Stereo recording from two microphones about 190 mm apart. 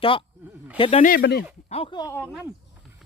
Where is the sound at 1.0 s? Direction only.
55° left (ahead or behind).